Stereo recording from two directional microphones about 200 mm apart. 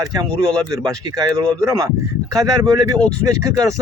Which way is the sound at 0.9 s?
15° right (ahead or behind).